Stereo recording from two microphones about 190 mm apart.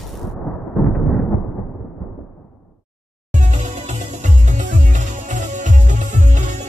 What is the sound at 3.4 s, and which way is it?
Music, 40° right (ahead or behind).